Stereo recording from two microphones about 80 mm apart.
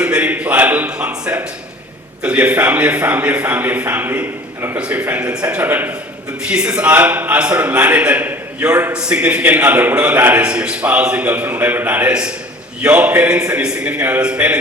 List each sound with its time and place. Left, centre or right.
0.0 s a man's voice: centre
4.8 s a man's voice: centre
6.5 s a man's voice: centre